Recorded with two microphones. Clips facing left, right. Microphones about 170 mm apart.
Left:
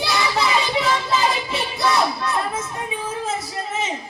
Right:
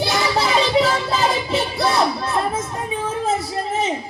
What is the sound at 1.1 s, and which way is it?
Music, 35° right (ahead or behind).